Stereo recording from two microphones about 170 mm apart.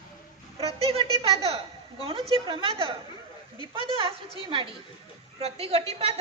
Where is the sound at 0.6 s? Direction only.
35° right (ahead or behind).